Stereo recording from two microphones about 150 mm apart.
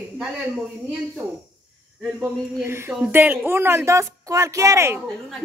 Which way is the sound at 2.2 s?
15° right (ahead or behind).